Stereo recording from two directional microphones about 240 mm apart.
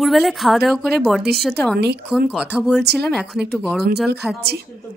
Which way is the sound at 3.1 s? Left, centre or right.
Centre.